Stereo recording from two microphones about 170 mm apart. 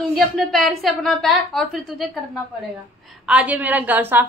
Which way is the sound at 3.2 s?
10° right (ahead or behind).